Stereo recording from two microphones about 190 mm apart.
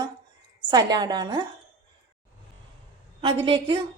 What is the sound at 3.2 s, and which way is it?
Speech, 25° right (ahead or behind).